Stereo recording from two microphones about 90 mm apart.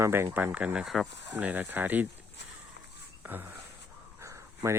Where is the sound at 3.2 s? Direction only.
25° right (ahead or behind).